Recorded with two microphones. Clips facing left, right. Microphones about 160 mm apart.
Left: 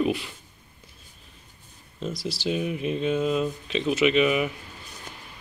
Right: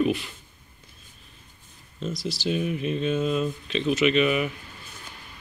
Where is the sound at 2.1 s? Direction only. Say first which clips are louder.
Right 1 dB; 30° left (ahead or behind).